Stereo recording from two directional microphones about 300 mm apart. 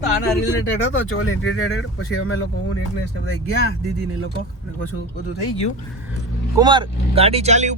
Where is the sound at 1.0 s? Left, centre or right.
Left.